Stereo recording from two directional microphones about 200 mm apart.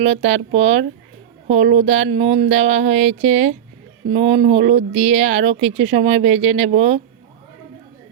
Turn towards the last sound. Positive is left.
turn(degrees=-30)  # may be behind; listen again after turning